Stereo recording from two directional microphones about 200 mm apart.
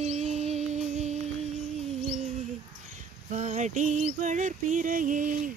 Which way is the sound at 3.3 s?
35° right (ahead or behind).